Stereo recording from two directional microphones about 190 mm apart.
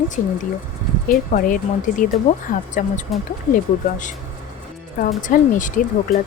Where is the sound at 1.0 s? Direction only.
45° left (ahead or behind).